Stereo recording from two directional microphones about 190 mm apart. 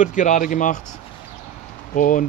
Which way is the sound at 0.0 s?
40° left (ahead or behind).